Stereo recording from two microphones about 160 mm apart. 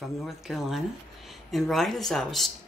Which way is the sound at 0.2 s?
Centre (ahead or behind).